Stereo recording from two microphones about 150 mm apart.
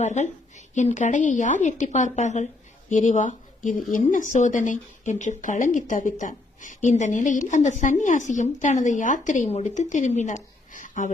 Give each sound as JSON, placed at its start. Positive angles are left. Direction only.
{"t": 0.0, "sound": "a woman's voice", "side_deg": 55}